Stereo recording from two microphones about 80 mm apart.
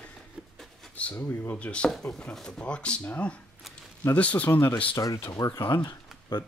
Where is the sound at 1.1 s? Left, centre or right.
Left.